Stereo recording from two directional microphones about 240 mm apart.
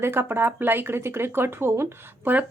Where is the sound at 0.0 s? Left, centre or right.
Centre.